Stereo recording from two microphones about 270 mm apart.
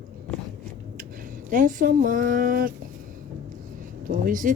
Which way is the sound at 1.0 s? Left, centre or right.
Right.